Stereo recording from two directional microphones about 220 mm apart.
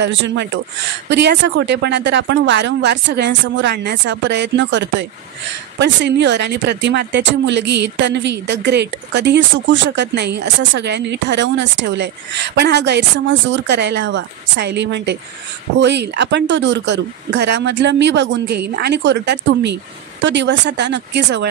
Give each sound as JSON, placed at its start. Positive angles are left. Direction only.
{"t": 0.0, "sound": "speech", "side_deg": -55}